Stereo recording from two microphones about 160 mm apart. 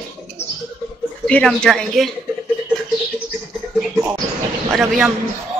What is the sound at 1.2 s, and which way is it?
Speech, 5° left (ahead or behind).